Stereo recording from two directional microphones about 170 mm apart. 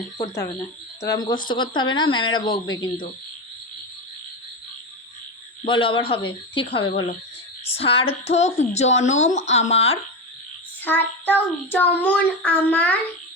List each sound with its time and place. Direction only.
1.0 s speech: 25° left (ahead or behind)
5.6 s speech: 30° left (ahead or behind)
10.8 s child singing: 10° left (ahead or behind)